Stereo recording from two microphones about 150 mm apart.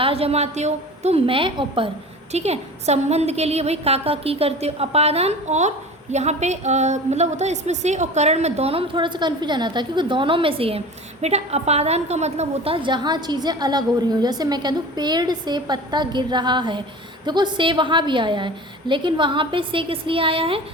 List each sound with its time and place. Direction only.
0.0 s a woman's voice: 40° right (ahead or behind)
2.3 s a woman's voice: 45° right (ahead or behind)